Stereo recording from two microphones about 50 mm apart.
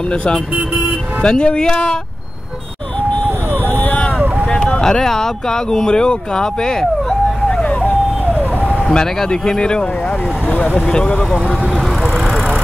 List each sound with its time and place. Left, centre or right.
0.1 s speech: left
3.6 s vehicle: left
4.5 s speech: centre
8.9 s speech: centre
10.9 s speech: centre